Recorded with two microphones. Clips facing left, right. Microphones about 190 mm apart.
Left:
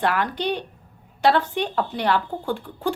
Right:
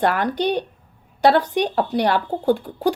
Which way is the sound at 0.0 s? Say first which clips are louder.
Right 4 dB; 40° right (ahead or behind).